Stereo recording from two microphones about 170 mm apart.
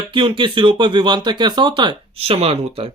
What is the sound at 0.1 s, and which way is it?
Speech, 30° right (ahead or behind).